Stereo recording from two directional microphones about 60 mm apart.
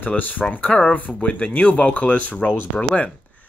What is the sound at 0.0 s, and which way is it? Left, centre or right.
Speech, left.